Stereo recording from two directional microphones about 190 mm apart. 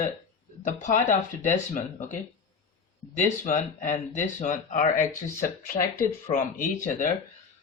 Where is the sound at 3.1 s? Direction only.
40° left (ahead or behind).